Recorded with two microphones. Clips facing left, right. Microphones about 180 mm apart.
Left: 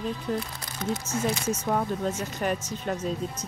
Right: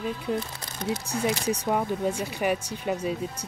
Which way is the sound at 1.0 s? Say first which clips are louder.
Right 2 dB; 15° right (ahead or behind).